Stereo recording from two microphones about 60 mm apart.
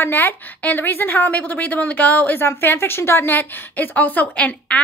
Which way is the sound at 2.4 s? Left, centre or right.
Left.